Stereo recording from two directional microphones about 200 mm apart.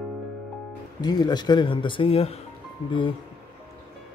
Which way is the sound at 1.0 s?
20° left (ahead or behind).